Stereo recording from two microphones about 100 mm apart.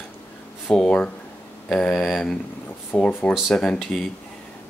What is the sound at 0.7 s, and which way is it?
Speech, 10° left (ahead or behind).